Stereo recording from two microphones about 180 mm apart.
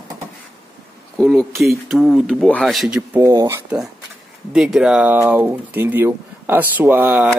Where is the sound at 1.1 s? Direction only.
Centre (ahead or behind).